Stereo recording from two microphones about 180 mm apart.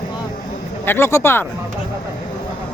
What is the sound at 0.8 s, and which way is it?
Speech, 15° left (ahead or behind).